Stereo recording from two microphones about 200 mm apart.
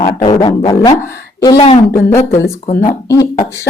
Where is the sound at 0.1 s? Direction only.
15° left (ahead or behind).